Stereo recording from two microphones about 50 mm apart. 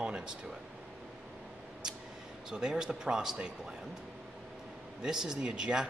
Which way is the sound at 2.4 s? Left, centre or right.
Centre.